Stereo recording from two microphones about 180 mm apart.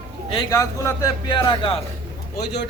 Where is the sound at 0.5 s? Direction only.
20° left (ahead or behind).